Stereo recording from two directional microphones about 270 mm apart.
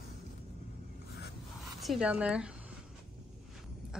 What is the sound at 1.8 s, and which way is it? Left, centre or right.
Speech, centre.